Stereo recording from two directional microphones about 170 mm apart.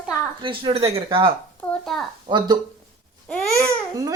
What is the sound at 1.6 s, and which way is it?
Speech, 5° left (ahead or behind).